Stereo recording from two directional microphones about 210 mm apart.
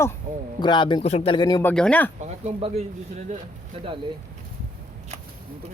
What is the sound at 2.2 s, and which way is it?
Speech, 30° right (ahead or behind).